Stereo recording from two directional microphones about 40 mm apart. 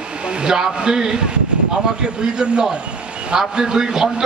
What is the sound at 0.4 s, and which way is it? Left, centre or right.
A man's voice, right.